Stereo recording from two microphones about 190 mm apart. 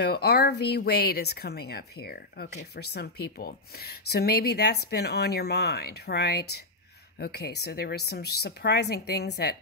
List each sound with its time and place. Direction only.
0.0 s speech: 60° left (ahead or behind)